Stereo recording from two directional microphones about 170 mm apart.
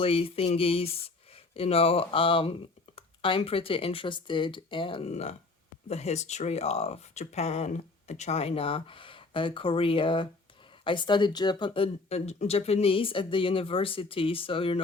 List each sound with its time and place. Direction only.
0.0 s speech: 35° left (ahead or behind)